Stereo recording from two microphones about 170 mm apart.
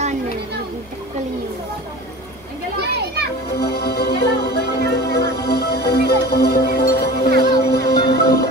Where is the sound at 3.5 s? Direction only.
70° left (ahead or behind).